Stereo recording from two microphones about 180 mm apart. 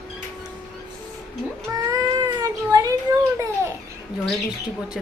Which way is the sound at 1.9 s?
20° right (ahead or behind).